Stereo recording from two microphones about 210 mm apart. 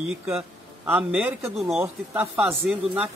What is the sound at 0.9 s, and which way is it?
Speech, 5° right (ahead or behind).